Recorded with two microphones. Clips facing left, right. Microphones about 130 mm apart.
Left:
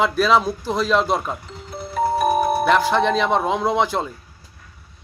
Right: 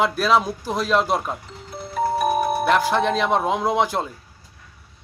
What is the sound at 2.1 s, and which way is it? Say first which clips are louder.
Music: left 3 dB; 35° left (ahead or behind).